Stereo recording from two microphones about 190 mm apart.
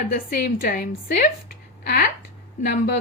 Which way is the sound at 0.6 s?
50° left (ahead or behind).